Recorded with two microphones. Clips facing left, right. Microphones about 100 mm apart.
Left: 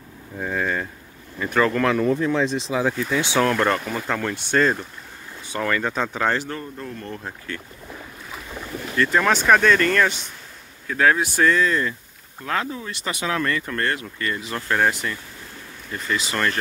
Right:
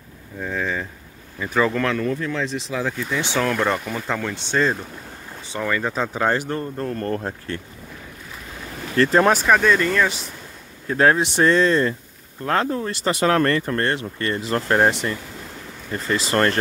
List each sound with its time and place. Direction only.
0.4 s speech: 10° left (ahead or behind)
1.4 s speech: 5° right (ahead or behind)
1.9 s speech: 20° left (ahead or behind)
3.3 s speech: centre (ahead or behind)
6.2 s speech: 15° right (ahead or behind)
6.8 s speech: 55° right (ahead or behind)
7.2 s speech: 35° right (ahead or behind)
8.9 s speech: 40° right (ahead or behind)
9.3 s speech: 5° right (ahead or behind)
10.9 s speech: 35° right (ahead or behind)
11.2 s speech: 25° right (ahead or behind)
12.4 s speech: 45° right (ahead or behind)
12.9 s speech: 35° right (ahead or behind)
13.2 s speech: 50° right (ahead or behind)